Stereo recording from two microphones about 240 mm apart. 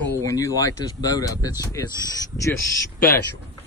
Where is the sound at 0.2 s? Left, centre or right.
Centre.